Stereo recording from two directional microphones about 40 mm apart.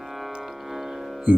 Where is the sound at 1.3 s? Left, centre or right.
Right.